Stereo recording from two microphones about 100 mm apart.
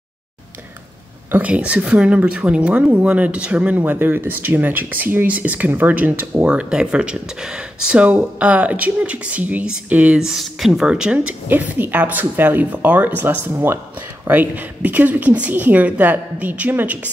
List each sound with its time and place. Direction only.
1.3 s speech: 15° right (ahead or behind)